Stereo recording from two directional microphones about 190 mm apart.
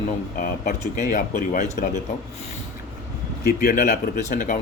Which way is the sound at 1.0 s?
45° left (ahead or behind).